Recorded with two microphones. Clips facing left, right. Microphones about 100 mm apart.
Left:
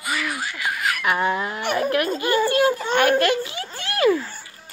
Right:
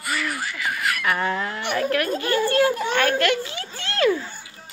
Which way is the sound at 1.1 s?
15° left (ahead or behind).